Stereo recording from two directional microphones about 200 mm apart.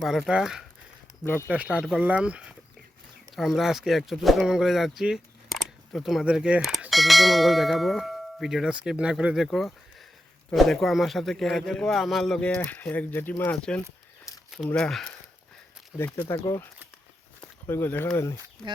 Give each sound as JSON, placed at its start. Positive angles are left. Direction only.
{"t": 0.0, "sound": "speech", "side_deg": 0}
{"t": 1.2, "sound": "speech", "side_deg": 10}
{"t": 1.5, "sound": "speech", "side_deg": -5}